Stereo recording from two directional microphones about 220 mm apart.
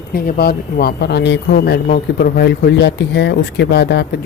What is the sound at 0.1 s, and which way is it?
Speech, 45° left (ahead or behind).